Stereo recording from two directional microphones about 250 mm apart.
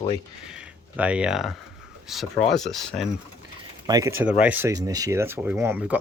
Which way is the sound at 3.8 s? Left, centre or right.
Centre.